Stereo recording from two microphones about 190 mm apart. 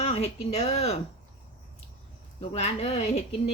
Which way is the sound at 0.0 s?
35° left (ahead or behind).